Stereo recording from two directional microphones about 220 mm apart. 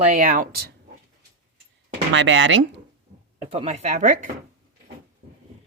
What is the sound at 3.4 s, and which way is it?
Speech, 30° right (ahead or behind).